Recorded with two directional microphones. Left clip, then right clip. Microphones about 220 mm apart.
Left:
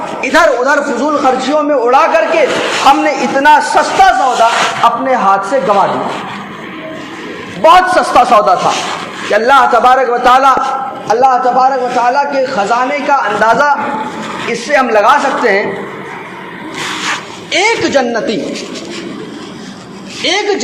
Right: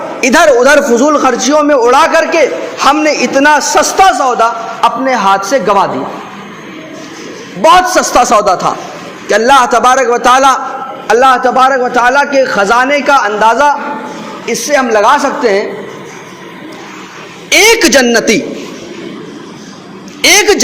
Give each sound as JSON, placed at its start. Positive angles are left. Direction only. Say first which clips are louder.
{"t": 0.2, "sound": "a man's voice", "louder": "right 3 dB", "side_deg": -50}
{"t": 7.6, "sound": "a man's voice", "louder": "even", "side_deg": -45}
{"t": 17.5, "sound": "a man's voice", "louder": "right 5 dB", "side_deg": -50}
{"t": 20.2, "sound": "a man's voice", "louder": "right 6 dB", "side_deg": -50}